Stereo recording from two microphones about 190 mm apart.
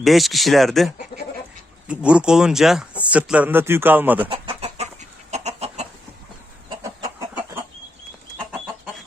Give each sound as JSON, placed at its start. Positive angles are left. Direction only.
{"t": 0.0, "sound": "speech", "side_deg": 0}
{"t": 1.1, "sound": "goat", "side_deg": 25}
{"t": 1.9, "sound": "speech", "side_deg": -5}
{"t": 4.3, "sound": "chicken", "side_deg": -30}
{"t": 6.7, "sound": "chicken", "side_deg": -20}